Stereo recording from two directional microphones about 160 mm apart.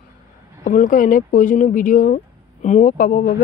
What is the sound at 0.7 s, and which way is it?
Speech, 55° left (ahead or behind).